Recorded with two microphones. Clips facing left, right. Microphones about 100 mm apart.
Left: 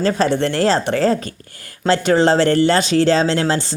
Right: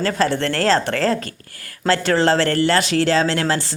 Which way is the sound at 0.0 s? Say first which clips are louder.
Left 3 dB; 20° left (ahead or behind).